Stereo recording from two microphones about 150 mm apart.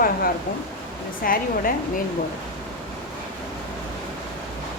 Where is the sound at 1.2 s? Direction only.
70° left (ahead or behind).